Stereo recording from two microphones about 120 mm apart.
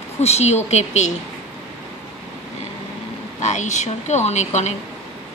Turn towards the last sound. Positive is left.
turn(degrees=70)  # may be behind; listen again after turning